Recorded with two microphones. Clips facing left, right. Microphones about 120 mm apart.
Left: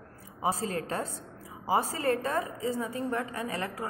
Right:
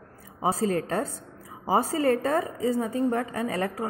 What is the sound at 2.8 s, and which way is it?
A woman's voice, 30° right (ahead or behind).